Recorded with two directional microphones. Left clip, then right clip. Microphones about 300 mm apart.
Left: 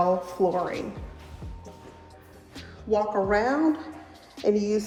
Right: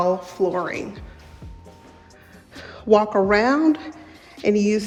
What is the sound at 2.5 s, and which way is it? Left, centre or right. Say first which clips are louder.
A woman's voice: right 9 dB; centre.